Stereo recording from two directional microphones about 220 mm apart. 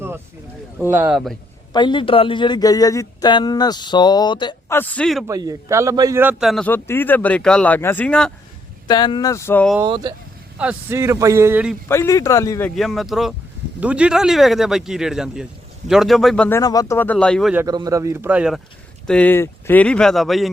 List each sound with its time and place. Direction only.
0.9 s a man's voice: 5° right (ahead or behind)
1.7 s speech: 20° left (ahead or behind)
4.8 s a man's voice: 5° left (ahead or behind)
5.3 s a man's voice: 15° right (ahead or behind); by 8.3 s 5° left (ahead or behind)
8.9 s speech: 20° left (ahead or behind)
9.8 s speech: 20° right (ahead or behind)
10.6 s speech: 10° right (ahead or behind)
11.9 s a man's voice: 15° left (ahead or behind)
17.5 s a man's voice: 10° right (ahead or behind)